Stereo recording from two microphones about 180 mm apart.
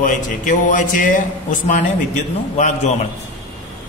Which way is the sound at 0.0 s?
45° left (ahead or behind).